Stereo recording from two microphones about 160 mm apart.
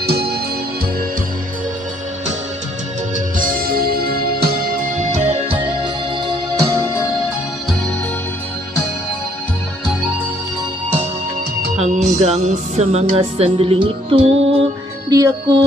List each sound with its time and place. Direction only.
0.0 s music: 80° right
3.3 s music: 65° right (ahead or behind); by 5.6 s 40° right (ahead or behind)
11.7 s music: 45° right (ahead or behind)
15.0 s music: 20° right (ahead or behind)